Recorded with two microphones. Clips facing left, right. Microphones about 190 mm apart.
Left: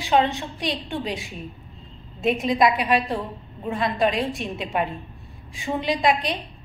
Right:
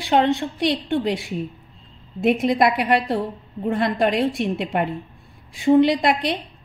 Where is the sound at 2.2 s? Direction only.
60° right (ahead or behind).